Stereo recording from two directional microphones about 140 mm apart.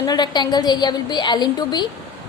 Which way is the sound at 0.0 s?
30° left (ahead or behind).